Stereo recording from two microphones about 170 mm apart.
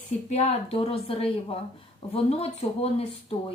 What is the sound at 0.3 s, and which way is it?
Speech, 40° left (ahead or behind).